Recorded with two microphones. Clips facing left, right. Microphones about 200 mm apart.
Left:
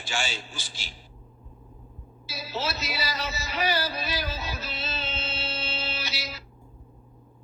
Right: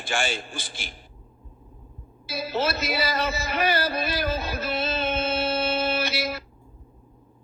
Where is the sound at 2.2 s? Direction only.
55° right (ahead or behind).